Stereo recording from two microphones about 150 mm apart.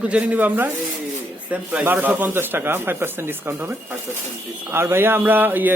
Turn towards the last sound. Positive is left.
turn(degrees=-10)  # may be behind; listen again after turning